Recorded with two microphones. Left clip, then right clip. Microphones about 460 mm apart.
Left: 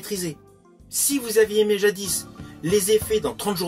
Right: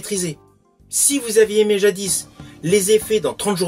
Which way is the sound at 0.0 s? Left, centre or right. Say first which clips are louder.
Right 5 dB; left.